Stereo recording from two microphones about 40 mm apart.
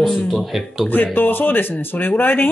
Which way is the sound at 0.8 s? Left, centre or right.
Left.